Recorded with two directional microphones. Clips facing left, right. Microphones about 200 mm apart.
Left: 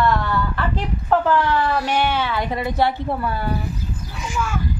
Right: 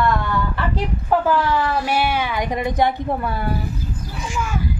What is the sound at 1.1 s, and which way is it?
Speech, 10° right (ahead or behind).